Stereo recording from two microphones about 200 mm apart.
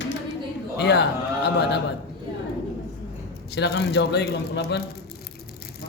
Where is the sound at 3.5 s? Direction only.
60° left (ahead or behind).